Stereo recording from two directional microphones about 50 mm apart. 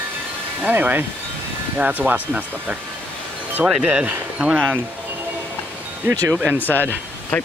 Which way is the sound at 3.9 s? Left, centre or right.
Right.